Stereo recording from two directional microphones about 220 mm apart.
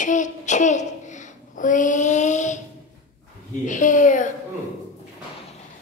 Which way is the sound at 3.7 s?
35° left (ahead or behind).